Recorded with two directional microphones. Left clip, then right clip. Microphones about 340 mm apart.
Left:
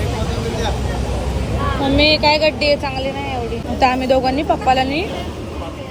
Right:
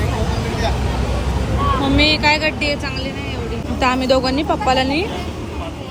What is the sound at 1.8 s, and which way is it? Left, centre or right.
Speech, centre.